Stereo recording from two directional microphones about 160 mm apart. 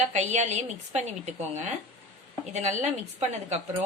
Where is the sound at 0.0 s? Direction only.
45° right (ahead or behind).